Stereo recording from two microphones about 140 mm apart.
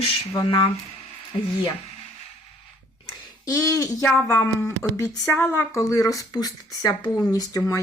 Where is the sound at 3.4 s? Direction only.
25° left (ahead or behind).